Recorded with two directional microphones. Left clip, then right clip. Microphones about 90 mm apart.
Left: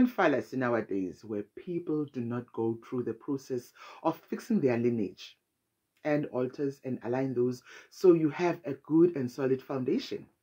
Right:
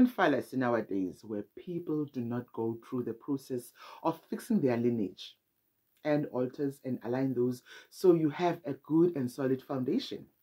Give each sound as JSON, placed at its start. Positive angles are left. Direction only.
{"t": 0.0, "sound": "speech", "side_deg": -15}